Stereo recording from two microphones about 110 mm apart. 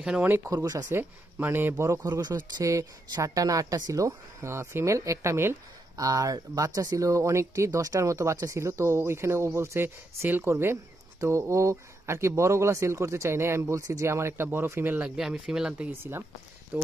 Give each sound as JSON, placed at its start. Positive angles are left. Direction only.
{"t": 0.0, "sound": "speech", "side_deg": -10}
{"t": 0.5, "sound": "speech", "side_deg": -35}
{"t": 0.8, "sound": "speech", "side_deg": -20}
{"t": 16.0, "sound": "speech", "side_deg": -20}